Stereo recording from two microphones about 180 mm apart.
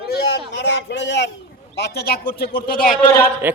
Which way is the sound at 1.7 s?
65° left (ahead or behind).